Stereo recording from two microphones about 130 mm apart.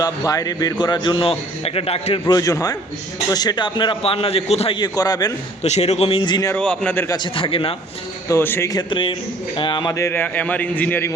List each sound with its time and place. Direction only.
0.0 s a man's voice: 25° left (ahead or behind); by 2.2 s 50° left (ahead or behind)
2.2 s a man's voice: 30° left (ahead or behind); by 4.8 s 50° left (ahead or behind)
4.8 s a man's voice: 30° left (ahead or behind)
5.6 s a man's voice: 60° left (ahead or behind); by 6.5 s 35° left (ahead or behind)
6.5 s a man's voice: 10° left (ahead or behind)
7.2 s a man's voice: 40° left (ahead or behind)
8.3 s a man's voice: 20° left (ahead or behind)
8.7 s a man's voice: 40° left (ahead or behind)
9.9 s a man's voice: 20° left (ahead or behind)